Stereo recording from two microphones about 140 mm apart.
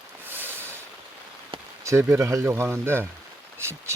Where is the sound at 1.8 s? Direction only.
20° right (ahead or behind).